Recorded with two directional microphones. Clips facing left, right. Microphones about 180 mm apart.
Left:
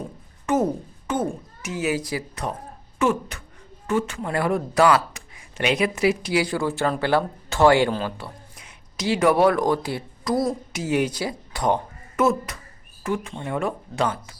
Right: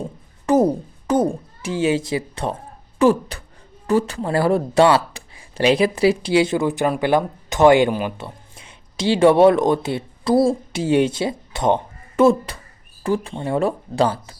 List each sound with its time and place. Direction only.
0.0 s a child's voice: 35° right (ahead or behind); by 8.3 s 15° right (ahead or behind)
8.5 s speech: 30° right (ahead or behind)